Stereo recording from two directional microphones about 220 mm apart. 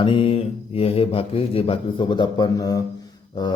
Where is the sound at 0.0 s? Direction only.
25° left (ahead or behind).